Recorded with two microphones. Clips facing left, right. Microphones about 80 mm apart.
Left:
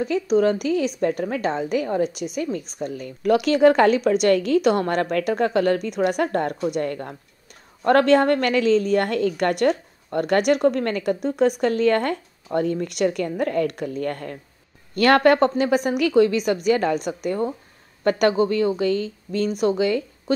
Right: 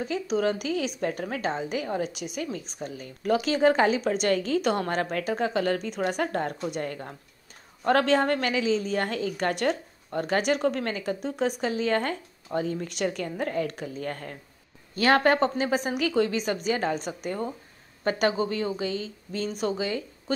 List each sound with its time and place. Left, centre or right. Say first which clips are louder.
0.0 s a woman's voice: left 7 dB; left
3.3 s a woman's voice: left 6 dB; left
18.6 s a woman's voice: left 8 dB; left